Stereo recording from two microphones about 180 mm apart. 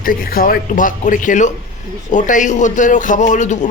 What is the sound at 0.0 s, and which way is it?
A man's voice, 50° left (ahead or behind).